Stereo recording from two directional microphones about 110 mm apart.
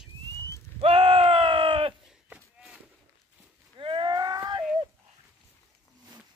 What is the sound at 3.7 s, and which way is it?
Cattle, 50° right (ahead or behind).